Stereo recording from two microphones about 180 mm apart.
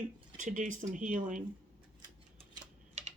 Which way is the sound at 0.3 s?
45° right (ahead or behind).